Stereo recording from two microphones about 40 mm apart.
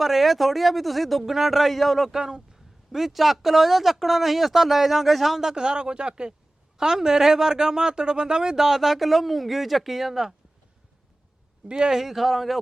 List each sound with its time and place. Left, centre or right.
0.0 s speech: centre
2.0 s speech: centre
11.8 s speech: centre